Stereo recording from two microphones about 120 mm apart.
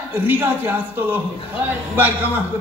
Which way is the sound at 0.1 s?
15° right (ahead or behind).